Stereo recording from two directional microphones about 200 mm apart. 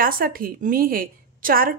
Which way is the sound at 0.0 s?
45° right (ahead or behind).